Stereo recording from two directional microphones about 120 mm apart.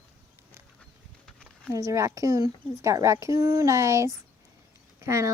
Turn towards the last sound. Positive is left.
turn(degrees=-25)  # may be behind; listen again after turning